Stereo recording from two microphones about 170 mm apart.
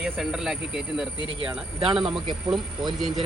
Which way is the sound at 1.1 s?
25° left (ahead or behind).